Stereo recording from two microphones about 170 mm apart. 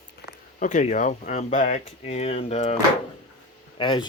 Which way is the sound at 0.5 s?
45° left (ahead or behind).